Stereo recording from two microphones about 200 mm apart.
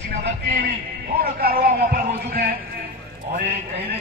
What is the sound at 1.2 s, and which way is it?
Speech, 50° right (ahead or behind).